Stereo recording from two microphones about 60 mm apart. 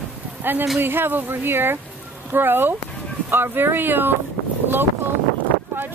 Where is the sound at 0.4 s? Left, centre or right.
Right.